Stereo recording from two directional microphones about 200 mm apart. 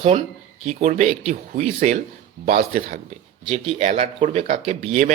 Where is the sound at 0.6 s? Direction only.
35° right (ahead or behind).